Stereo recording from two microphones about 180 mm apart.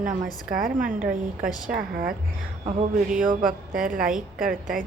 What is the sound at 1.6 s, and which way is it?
Speech, 55° right (ahead or behind).